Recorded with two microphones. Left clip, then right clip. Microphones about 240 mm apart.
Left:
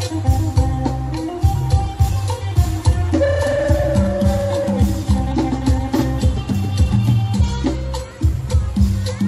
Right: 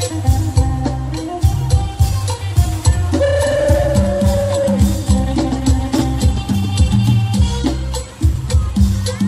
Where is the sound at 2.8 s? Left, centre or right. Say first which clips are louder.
Right 1 dB; right.